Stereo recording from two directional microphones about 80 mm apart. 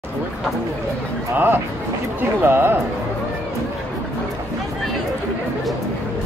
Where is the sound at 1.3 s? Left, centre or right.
Right.